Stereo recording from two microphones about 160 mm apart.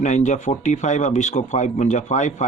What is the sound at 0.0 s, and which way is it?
Speech, 45° left (ahead or behind).